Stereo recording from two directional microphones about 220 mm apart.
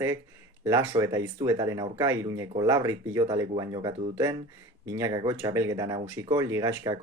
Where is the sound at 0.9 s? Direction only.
15° right (ahead or behind).